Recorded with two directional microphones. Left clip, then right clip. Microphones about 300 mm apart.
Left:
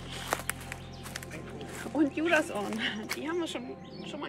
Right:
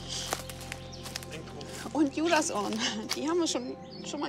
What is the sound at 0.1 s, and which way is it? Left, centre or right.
Music, centre.